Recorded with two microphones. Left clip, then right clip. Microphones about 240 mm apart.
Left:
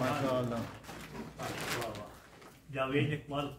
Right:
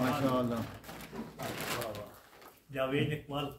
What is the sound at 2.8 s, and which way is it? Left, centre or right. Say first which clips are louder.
Speech: right 1 dB; right.